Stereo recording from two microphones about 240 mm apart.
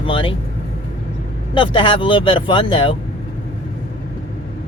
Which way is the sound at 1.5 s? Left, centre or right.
Left.